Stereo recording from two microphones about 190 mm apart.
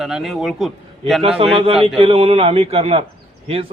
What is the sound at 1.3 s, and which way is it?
A man's voice, 30° right (ahead or behind).